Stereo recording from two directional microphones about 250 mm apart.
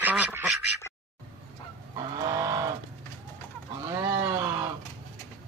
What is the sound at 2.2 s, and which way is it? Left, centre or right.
Vehicle, centre.